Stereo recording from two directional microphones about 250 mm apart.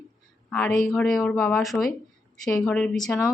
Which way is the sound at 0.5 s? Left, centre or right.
Centre.